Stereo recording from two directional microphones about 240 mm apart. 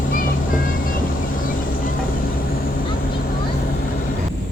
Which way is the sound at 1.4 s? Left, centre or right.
Left.